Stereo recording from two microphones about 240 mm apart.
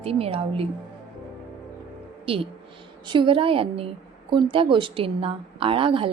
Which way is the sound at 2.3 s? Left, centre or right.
Right.